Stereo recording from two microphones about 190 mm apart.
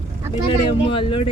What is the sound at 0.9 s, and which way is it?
Speech, 25° left (ahead or behind).